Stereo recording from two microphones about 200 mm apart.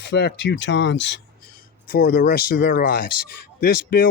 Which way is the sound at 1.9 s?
50° left (ahead or behind).